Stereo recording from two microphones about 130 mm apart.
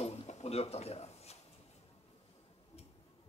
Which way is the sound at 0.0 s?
55° left (ahead or behind).